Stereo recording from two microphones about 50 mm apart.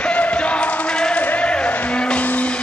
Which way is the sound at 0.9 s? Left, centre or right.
Centre.